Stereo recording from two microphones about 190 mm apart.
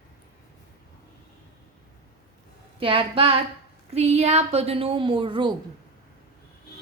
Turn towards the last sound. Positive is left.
turn(degrees=-25)  # may be behind; listen again after turning